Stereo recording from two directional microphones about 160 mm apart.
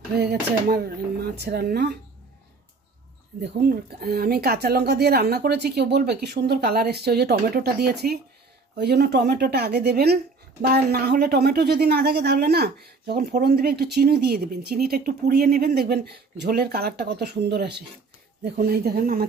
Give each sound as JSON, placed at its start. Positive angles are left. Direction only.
{"t": 0.2, "sound": "speech", "side_deg": -75}
{"t": 3.3, "sound": "speech", "side_deg": -85}
{"t": 18.4, "sound": "speech", "side_deg": -75}